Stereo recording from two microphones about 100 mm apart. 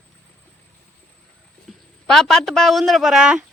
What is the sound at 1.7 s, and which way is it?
A man's voice, 5° left (ahead or behind).